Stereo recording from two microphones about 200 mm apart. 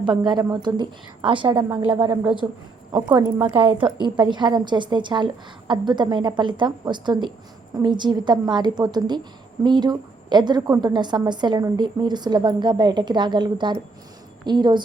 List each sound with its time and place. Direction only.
0.0 s a woman's voice: 20° right (ahead or behind)
1.9 s speech: 10° right (ahead or behind)
2.9 s speech: 20° right (ahead or behind)
4.0 s a woman's voice: 20° right (ahead or behind)